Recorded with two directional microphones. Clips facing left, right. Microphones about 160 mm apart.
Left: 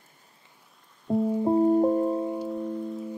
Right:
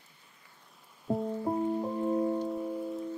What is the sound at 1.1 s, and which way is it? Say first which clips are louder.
Music: left 6 dB; centre (ahead or behind).